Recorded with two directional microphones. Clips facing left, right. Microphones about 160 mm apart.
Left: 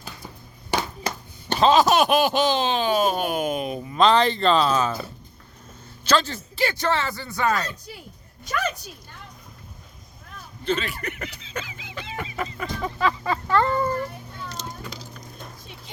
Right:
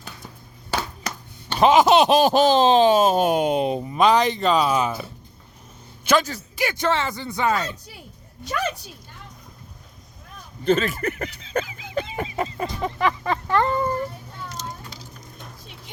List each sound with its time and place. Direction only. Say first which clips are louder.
1.5 s speech: right 2 dB; 15° right (ahead or behind)
2.1 s speech: right 4 dB; 40° right (ahead or behind)
3.9 s speech: even; 15° right (ahead or behind)
6.1 s speech: right 2 dB; 10° right (ahead or behind)
10.7 s speech: right 6 dB; 45° right (ahead or behind); by 13.9 s 15° right (ahead or behind)